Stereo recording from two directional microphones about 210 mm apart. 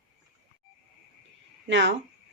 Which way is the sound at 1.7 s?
60° right (ahead or behind).